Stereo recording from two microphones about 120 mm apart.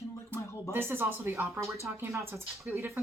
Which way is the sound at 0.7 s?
20° right (ahead or behind).